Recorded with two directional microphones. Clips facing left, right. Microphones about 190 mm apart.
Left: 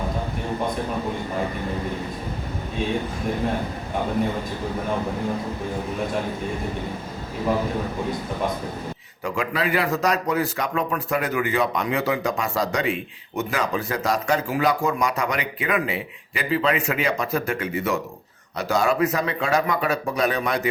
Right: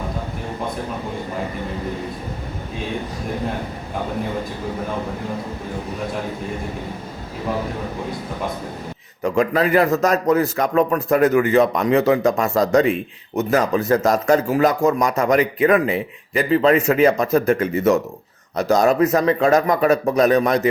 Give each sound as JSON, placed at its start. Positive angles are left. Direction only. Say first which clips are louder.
{"t": 9.2, "sound": "speech", "louder": "right 7 dB", "side_deg": -40}